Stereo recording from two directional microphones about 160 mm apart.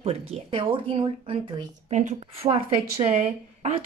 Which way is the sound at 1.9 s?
50° right (ahead or behind).